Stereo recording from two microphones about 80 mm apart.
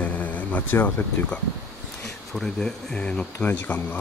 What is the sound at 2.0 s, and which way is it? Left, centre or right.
Speech, centre.